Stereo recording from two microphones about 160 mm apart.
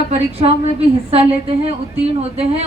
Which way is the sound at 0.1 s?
40° right (ahead or behind).